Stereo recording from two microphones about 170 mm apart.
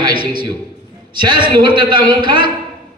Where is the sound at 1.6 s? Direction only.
30° right (ahead or behind).